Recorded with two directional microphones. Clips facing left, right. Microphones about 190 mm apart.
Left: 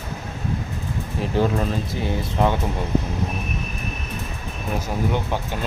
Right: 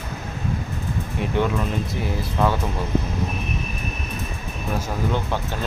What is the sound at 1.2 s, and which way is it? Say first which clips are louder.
Speech: left 2 dB; 35° left (ahead or behind).